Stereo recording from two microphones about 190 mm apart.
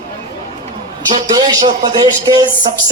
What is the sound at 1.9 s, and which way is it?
Speech, 20° right (ahead or behind).